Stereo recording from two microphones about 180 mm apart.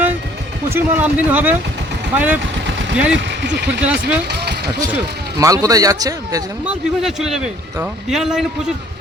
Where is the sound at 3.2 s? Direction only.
75° right (ahead or behind).